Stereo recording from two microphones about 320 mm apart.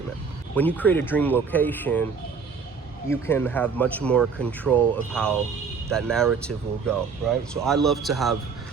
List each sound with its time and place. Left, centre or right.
0.5 s speech: centre
3.1 s speech: centre